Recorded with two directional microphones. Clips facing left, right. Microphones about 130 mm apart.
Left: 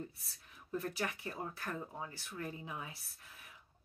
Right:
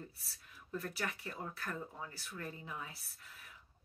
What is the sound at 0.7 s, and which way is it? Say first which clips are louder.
A woman's voice: left 2 dB; 25° left (ahead or behind).